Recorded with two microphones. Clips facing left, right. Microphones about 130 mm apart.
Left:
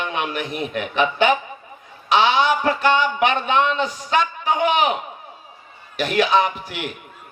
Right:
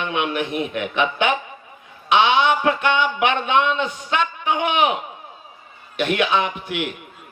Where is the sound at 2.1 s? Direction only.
35° left (ahead or behind).